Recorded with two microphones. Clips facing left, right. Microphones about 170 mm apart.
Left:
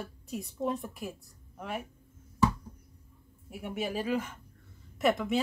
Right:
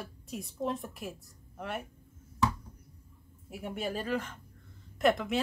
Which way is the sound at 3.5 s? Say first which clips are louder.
Left 1 dB; 5° left (ahead or behind).